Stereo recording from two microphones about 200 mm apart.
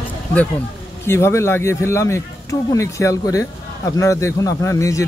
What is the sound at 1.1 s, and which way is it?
Speech, 15° left (ahead or behind).